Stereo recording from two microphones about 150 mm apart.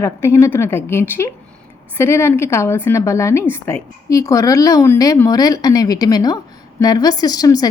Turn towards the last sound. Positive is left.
turn(degrees=25)  # may be behind; listen again after turning